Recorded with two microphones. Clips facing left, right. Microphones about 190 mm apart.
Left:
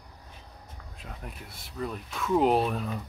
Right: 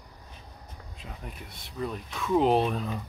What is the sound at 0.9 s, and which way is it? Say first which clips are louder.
Speech: even; centre (ahead or behind).